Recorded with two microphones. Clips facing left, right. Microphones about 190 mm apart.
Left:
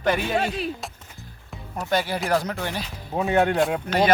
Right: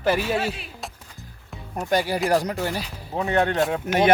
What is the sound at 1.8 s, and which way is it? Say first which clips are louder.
Speech: right 2 dB; 15° right (ahead or behind).